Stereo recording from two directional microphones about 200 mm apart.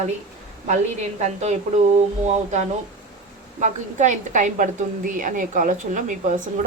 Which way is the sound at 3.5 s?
35° right (ahead or behind).